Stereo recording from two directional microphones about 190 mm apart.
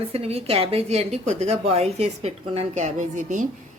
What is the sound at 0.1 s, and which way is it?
A woman's voice, 30° right (ahead or behind).